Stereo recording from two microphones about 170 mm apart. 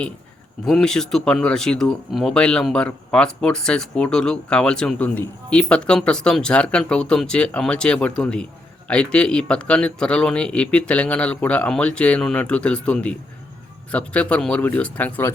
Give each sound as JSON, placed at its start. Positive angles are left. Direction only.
{"t": 0.6, "sound": "speech", "side_deg": 5}